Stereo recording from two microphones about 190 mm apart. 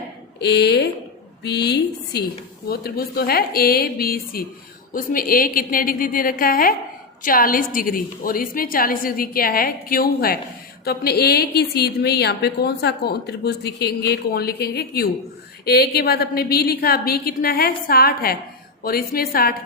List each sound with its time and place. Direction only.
0.3 s a woman's voice: 60° left (ahead or behind)